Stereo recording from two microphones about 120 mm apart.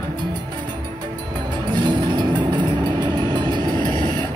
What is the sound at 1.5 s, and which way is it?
Vehicle, 40° right (ahead or behind).